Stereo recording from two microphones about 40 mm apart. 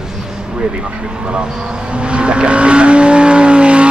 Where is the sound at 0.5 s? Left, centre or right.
Right.